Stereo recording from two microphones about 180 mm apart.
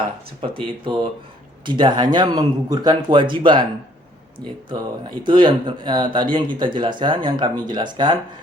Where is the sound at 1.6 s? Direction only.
25° right (ahead or behind).